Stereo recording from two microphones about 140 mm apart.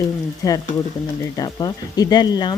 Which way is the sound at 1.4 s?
25° left (ahead or behind).